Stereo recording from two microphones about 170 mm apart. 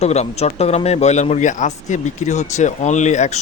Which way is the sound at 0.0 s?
40° left (ahead or behind).